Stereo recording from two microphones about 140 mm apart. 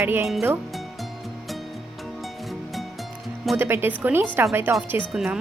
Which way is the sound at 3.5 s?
15° right (ahead or behind).